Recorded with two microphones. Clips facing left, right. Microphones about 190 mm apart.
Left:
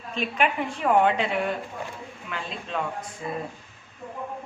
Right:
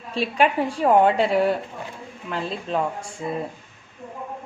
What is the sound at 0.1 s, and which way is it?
A woman's voice, 35° right (ahead or behind).